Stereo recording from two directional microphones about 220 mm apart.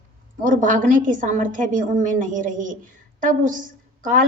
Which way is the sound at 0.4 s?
35° right (ahead or behind).